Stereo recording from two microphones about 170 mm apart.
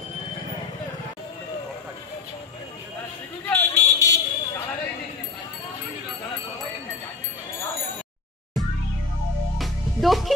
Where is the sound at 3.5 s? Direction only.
10° left (ahead or behind).